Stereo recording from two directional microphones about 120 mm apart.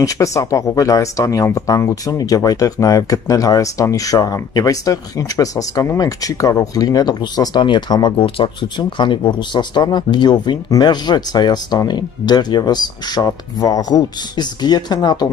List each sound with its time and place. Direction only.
0.0 s speech: 30° left (ahead or behind)